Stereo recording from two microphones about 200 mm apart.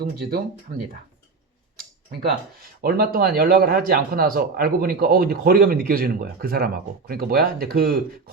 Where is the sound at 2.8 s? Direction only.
50° right (ahead or behind).